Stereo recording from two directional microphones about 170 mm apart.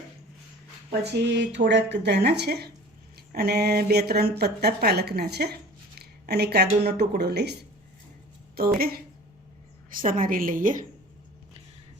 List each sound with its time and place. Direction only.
0.9 s speech: 90° right; by 7.5 s 75° right (ahead or behind)
8.5 s a woman's voice: 60° right (ahead or behind)